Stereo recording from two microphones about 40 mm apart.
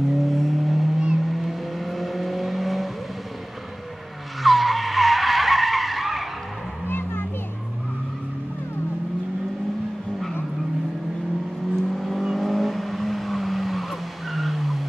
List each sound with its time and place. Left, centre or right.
0.1 s vehicle: centre
4.4 s vehicle: centre
6.9 s children playing: left
11.9 s vehicle: centre